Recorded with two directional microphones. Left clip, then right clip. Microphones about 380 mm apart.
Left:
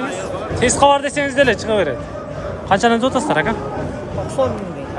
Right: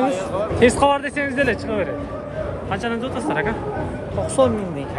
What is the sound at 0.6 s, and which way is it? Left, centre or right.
Speech, centre.